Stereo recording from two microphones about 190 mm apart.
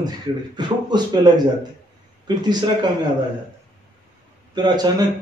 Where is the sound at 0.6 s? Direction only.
20° right (ahead or behind).